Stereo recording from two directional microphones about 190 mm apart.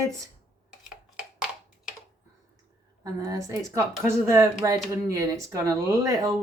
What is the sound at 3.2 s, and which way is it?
A woman's voice, 15° right (ahead or behind).